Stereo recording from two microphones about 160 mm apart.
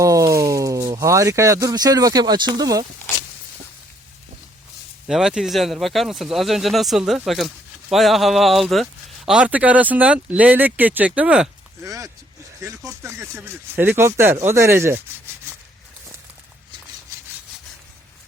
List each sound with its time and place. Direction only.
0.0 s speech: 20° right (ahead or behind)
5.0 s speech: 5° right (ahead or behind)
11.8 s speech: 20° right (ahead or behind)